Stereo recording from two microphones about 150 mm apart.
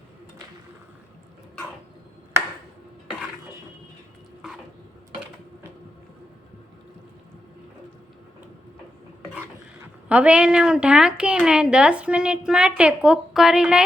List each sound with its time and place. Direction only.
10.1 s a woman's voice: 10° right (ahead or behind)